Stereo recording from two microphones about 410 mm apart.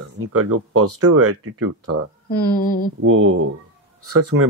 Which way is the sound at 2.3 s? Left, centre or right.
Left.